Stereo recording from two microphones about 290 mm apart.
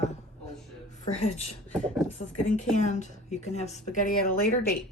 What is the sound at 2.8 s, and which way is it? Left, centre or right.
Speech, left.